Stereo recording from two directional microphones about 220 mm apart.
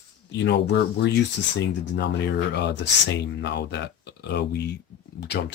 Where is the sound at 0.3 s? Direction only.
50° left (ahead or behind).